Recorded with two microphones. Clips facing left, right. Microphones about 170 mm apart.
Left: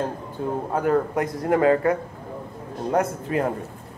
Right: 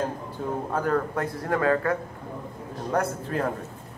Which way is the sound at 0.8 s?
15° left (ahead or behind).